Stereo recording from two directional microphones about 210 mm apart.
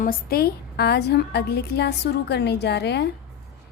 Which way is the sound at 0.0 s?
45° left (ahead or behind).